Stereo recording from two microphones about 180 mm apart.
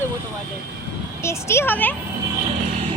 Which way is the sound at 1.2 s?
15° left (ahead or behind).